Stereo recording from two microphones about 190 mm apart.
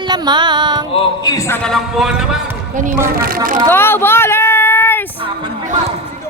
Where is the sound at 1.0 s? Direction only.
20° left (ahead or behind).